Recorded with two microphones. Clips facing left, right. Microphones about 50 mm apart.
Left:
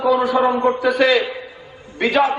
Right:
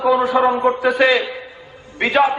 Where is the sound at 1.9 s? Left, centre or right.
Right.